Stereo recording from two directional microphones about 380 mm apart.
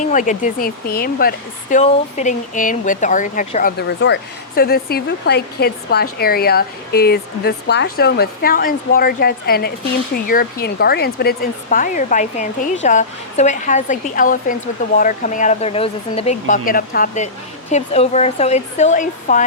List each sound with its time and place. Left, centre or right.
0.0 s speech: centre